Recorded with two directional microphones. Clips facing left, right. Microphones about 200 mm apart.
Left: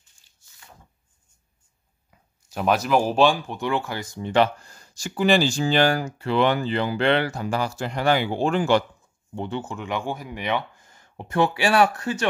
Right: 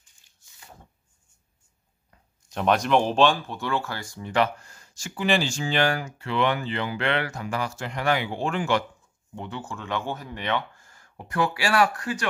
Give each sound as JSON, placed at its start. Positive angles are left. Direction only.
{"t": 2.0, "sound": "speech", "side_deg": 5}